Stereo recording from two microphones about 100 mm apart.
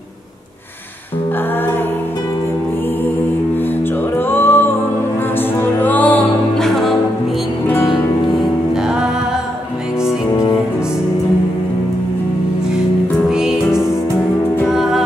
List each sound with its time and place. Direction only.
4.3 s music: 20° left (ahead or behind)
5.8 s music: 15° left (ahead or behind)
6.6 s music: centre (ahead or behind)
13.3 s music: 5° right (ahead or behind)